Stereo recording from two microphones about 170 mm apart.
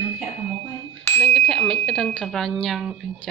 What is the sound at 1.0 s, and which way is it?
Speech, 10° left (ahead or behind).